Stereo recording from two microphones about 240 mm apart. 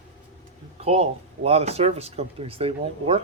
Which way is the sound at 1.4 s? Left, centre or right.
Right.